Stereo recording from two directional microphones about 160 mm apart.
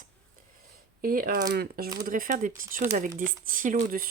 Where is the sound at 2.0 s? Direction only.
60° right (ahead or behind).